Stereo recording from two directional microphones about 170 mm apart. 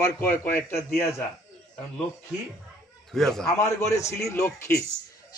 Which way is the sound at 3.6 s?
15° left (ahead or behind).